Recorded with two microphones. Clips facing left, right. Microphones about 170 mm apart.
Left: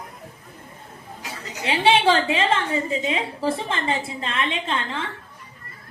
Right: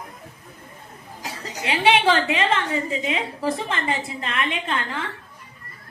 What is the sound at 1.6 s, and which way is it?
A woman's voice, 30° left (ahead or behind).